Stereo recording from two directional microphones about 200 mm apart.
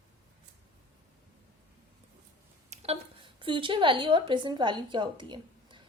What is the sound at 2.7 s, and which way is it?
A woman's voice, 30° right (ahead or behind).